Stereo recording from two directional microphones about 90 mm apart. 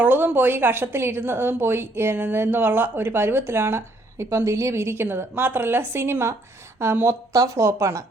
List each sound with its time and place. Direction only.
0.0 s a woman's voice: 20° right (ahead or behind)